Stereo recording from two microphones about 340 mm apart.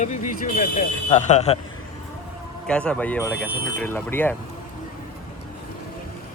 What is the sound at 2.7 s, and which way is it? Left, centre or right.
Speech, centre.